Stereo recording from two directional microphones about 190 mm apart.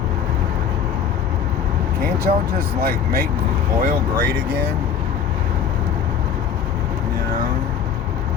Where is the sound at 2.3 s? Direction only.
45° right (ahead or behind).